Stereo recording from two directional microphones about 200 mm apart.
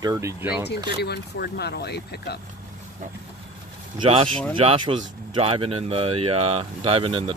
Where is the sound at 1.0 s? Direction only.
55° left (ahead or behind).